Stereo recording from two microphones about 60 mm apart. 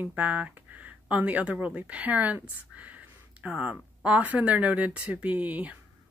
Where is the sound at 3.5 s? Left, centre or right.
Centre.